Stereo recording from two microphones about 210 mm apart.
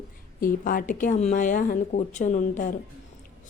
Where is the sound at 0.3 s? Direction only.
40° left (ahead or behind).